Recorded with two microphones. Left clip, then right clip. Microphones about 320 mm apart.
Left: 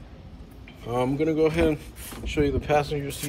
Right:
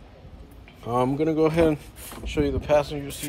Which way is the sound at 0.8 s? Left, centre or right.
Centre.